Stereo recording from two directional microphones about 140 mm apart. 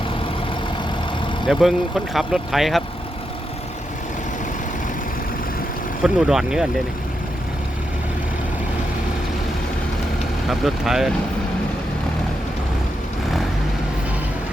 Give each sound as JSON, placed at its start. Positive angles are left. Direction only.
{"t": 1.5, "sound": "speech", "side_deg": -5}
{"t": 6.0, "sound": "speech", "side_deg": -5}
{"t": 10.5, "sound": "speech", "side_deg": 0}